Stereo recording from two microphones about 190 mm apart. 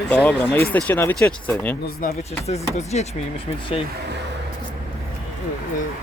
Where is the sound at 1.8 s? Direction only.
50° left (ahead or behind).